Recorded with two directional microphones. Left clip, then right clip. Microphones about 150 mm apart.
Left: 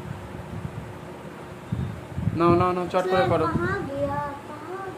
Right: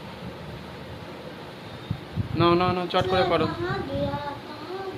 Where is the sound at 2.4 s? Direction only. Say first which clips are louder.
Left 1 dB; 15° left (ahead or behind).